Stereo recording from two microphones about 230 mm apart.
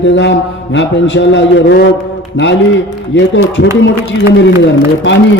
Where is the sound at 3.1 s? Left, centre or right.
Left.